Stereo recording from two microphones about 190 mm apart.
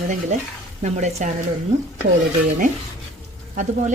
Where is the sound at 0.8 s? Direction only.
35° right (ahead or behind).